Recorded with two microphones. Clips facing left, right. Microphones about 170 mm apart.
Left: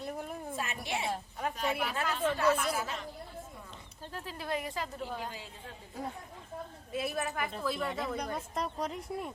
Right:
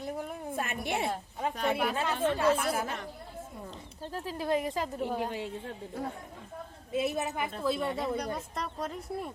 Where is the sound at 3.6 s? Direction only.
35° right (ahead or behind).